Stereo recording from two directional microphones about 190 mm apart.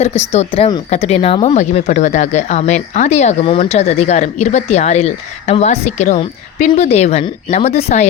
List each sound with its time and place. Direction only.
0.3 s speech: 30° left (ahead or behind)
1.5 s speech: 40° left (ahead or behind)